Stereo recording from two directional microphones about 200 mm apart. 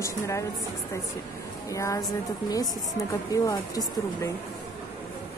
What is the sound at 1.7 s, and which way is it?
Speech, 15° left (ahead or behind).